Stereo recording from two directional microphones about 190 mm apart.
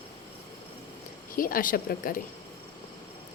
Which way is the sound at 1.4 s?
50° left (ahead or behind).